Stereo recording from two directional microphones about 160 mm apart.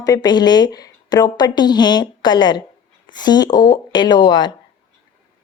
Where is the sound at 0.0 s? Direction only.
25° left (ahead or behind).